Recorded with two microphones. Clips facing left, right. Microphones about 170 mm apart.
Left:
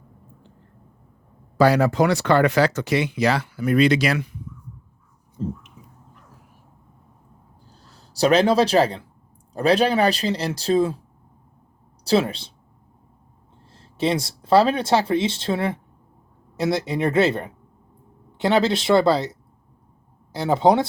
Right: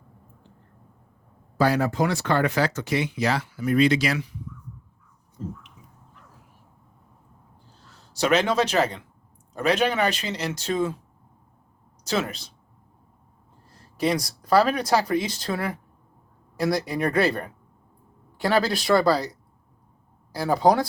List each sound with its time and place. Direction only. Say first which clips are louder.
1.5 s speech: left 5 dB; 90° left; by 4.4 s 55° left (ahead or behind)
5.4 s a sound: left 6 dB; 30° left (ahead or behind)
7.7 s speech: left 3 dB; 35° left (ahead or behind)
12.0 s speech: left 7 dB; 30° left (ahead or behind)
13.7 s speech: left 2 dB; 25° left (ahead or behind)